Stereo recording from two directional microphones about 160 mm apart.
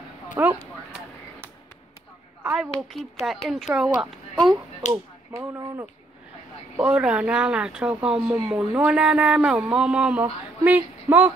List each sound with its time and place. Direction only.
0.4 s speech: 15° right (ahead or behind)
2.4 s speech: 5° right (ahead or behind)
4.9 s speech: 15° right (ahead or behind)
6.8 s speech: 5° right (ahead or behind)